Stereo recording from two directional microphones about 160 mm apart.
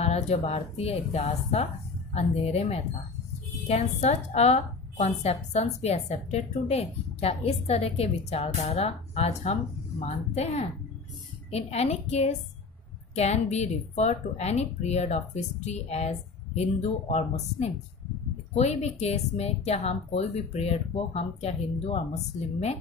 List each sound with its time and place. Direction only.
0.0 s a woman's voice: 45° left (ahead or behind)